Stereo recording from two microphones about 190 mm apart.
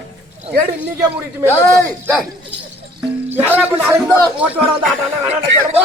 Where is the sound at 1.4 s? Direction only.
10° left (ahead or behind).